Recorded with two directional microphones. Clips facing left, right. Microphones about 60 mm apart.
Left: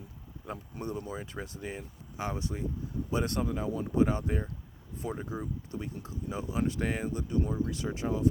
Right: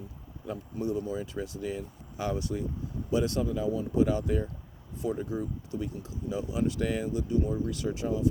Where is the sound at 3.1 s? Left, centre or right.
Left.